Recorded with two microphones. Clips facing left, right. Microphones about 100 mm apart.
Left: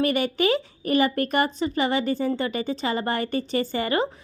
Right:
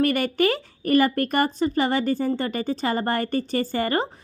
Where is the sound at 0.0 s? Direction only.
45° right (ahead or behind).